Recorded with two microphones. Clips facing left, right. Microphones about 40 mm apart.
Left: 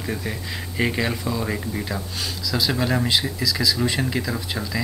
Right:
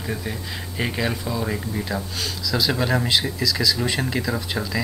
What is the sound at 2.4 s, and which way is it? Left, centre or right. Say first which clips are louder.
Speech: right 1 dB; right.